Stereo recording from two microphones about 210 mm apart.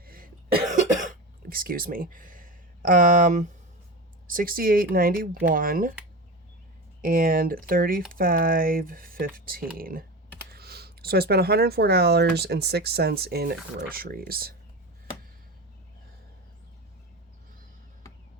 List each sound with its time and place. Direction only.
0.0 s cough: 45° right (ahead or behind)
4.3 s speech: 45° right (ahead or behind)
7.0 s speech: 40° right (ahead or behind)